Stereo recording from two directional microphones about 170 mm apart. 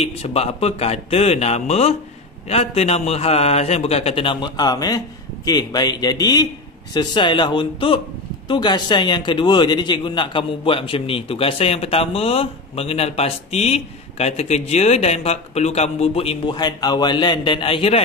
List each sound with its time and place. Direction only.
0.0 s a man's voice: 35° left (ahead or behind)